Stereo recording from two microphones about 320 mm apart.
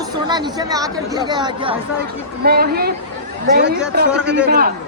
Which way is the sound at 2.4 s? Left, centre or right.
Right.